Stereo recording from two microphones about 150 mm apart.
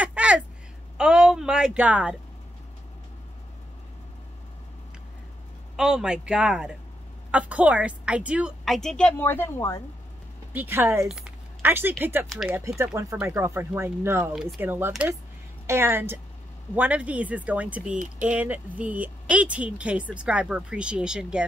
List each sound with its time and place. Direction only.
0.0 s a sound: 10° right (ahead or behind)
5.8 s a woman's voice: 5° right (ahead or behind)
9.1 s speech: 15° left (ahead or behind)
10.5 s a woman's voice: 15° right (ahead or behind)
11.1 s a sound: 5° right (ahead or behind)
12.0 s a woman's voice: 15° right (ahead or behind)